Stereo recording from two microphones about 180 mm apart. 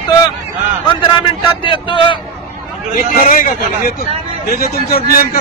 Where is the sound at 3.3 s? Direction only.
50° left (ahead or behind).